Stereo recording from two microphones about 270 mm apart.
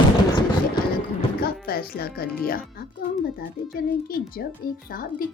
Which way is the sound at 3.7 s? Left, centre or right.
Left.